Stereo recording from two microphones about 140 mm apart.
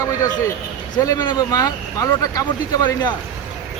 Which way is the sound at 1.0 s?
30° left (ahead or behind).